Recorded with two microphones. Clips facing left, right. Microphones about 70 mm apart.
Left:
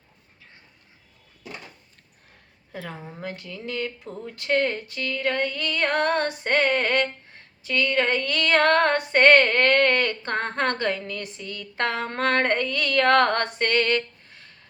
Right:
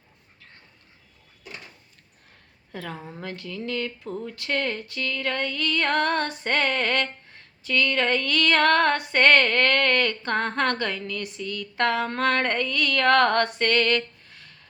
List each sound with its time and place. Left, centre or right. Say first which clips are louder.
2.7 s a woman's voice: right 1 dB; centre